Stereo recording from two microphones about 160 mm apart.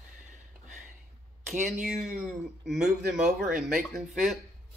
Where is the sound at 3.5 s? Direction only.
60° right (ahead or behind).